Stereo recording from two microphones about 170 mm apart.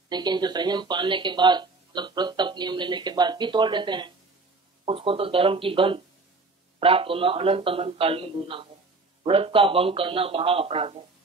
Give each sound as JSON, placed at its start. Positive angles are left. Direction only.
{"t": 0.1, "sound": "a man's voice", "side_deg": -25}